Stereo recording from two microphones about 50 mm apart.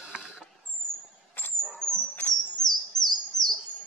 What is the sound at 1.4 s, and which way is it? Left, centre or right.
Squeal, left.